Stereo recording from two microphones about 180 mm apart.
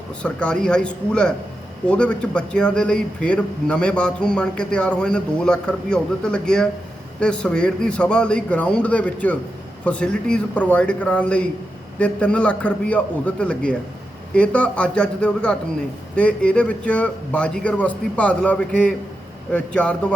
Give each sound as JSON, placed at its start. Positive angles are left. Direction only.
{"t": 0.2, "sound": "a man's voice", "side_deg": 5}